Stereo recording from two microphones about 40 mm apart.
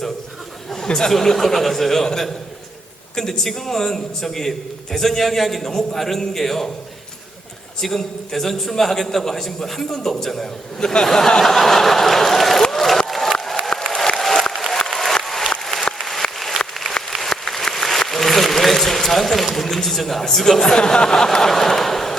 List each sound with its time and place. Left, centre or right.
0.9 s a man's voice: centre
3.2 s a man's voice: centre
7.8 s a man's voice: centre
12.7 s crowd: centre
13.1 s a sound: centre
14.2 s applause: centre
14.5 s applause: centre
16.0 s a sound: centre
17.4 s applause: centre
17.7 s a sound: centre